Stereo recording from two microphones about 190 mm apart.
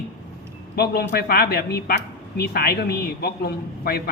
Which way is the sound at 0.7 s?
55° left (ahead or behind).